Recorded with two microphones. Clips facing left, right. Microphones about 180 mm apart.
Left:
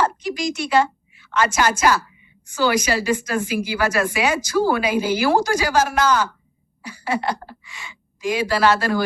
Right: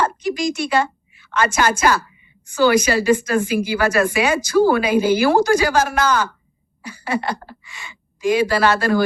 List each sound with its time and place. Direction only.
0.0 s a woman's voice: 55° right (ahead or behind)